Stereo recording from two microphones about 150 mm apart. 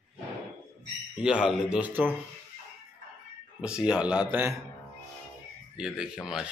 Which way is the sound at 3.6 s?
5° right (ahead or behind).